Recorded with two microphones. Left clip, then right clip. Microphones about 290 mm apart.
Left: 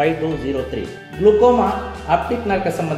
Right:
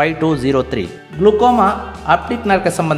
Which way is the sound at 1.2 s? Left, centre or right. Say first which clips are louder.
Right 2 dB; right.